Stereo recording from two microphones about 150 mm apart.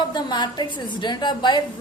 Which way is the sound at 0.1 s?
30° left (ahead or behind).